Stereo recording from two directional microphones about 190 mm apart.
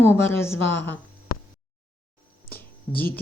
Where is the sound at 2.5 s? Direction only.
10° left (ahead or behind).